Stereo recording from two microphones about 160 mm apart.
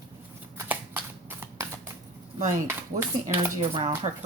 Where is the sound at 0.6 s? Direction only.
15° right (ahead or behind).